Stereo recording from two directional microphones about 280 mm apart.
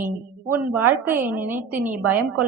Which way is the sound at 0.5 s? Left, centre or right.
Centre.